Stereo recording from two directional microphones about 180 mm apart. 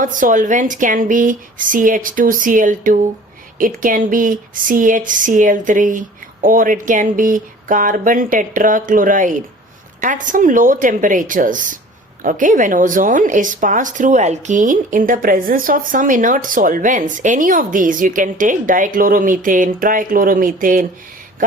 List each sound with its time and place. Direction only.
0.0 s a woman's voice: 50° right (ahead or behind)